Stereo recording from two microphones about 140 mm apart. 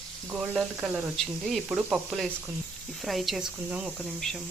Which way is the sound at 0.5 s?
5° right (ahead or behind).